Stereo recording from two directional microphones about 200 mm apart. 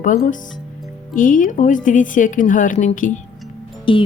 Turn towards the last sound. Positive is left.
turn(degrees=25)  # may be behind; listen again after turning